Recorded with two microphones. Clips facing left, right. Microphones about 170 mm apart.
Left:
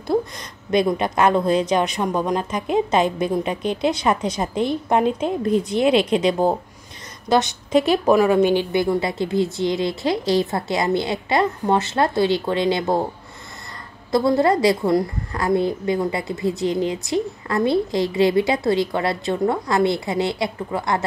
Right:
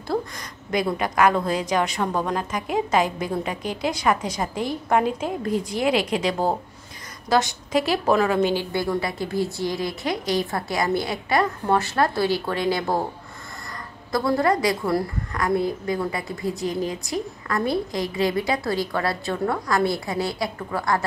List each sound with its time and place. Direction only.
0.7 s a woman's voice: 25° left (ahead or behind)
14.1 s a woman's voice: 25° left (ahead or behind)